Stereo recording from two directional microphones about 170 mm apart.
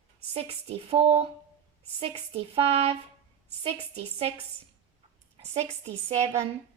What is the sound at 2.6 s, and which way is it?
Speech, 35° right (ahead or behind).